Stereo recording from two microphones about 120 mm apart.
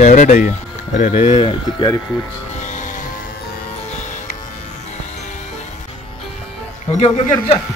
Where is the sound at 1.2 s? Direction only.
50° left (ahead or behind).